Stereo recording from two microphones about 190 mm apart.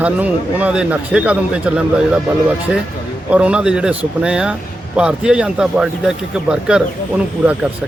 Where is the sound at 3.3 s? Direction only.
5° right (ahead or behind).